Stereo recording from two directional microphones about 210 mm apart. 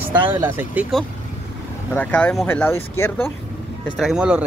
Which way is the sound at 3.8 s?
Centre (ahead or behind).